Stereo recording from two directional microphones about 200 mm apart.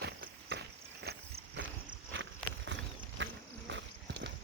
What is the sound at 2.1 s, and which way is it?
Walk, 65° right (ahead or behind).